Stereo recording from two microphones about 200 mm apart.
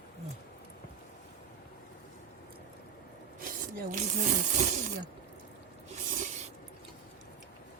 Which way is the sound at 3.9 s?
40° right (ahead or behind).